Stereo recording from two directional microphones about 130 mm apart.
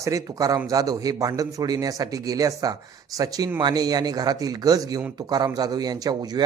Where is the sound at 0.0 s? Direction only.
25° right (ahead or behind).